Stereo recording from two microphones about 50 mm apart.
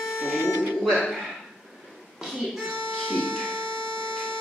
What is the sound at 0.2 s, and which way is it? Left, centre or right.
Speech, left.